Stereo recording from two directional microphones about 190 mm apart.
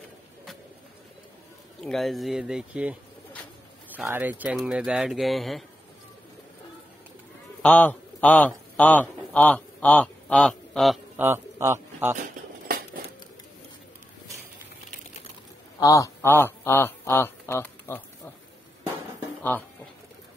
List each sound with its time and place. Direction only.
1.8 s speech: centre (ahead or behind)
7.6 s a man's voice: 10° left (ahead or behind)
11.1 s speech: 10° right (ahead or behind)
12.2 s cutlery: 50° right (ahead or behind)
15.8 s speech: 15° left (ahead or behind)